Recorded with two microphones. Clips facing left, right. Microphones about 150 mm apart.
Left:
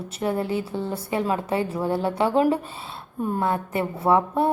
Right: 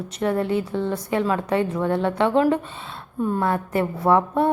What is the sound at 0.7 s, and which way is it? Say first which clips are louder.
Speech: right 4 dB; centre (ahead or behind).